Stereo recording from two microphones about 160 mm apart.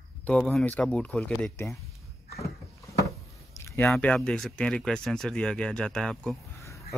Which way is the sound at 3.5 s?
15° left (ahead or behind).